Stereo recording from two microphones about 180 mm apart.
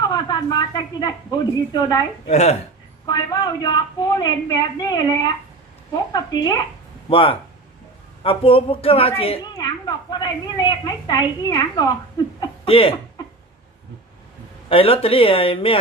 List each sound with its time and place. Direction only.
0.0 s a woman's voice: 25° left (ahead or behind)
2.3 s speech: 35° left (ahead or behind)
3.1 s a woman's voice: 25° left (ahead or behind)
14.7 s speech: 30° left (ahead or behind)